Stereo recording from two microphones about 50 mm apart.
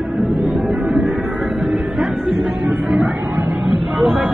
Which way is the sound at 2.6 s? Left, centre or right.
Right.